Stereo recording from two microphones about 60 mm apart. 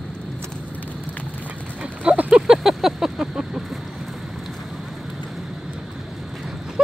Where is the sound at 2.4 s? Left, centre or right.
Centre.